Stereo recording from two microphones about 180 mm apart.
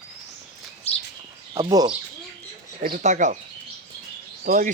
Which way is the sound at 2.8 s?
45° right (ahead or behind).